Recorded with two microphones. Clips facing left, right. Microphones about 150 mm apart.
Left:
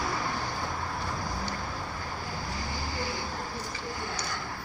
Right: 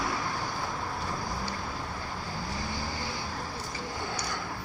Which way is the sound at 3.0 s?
20° right (ahead or behind).